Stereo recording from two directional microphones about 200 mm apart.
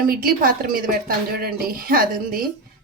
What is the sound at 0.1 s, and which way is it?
Speech, 50° right (ahead or behind).